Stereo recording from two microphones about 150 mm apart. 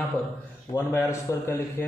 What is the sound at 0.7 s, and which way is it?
A man's voice, 15° left (ahead or behind).